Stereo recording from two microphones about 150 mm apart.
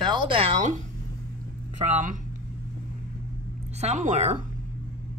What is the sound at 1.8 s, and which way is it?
Speech, 55° right (ahead or behind).